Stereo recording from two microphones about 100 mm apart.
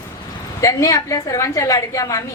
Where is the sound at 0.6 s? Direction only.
30° left (ahead or behind).